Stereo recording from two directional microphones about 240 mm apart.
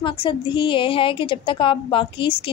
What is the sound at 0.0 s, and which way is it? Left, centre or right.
A woman's voice, left.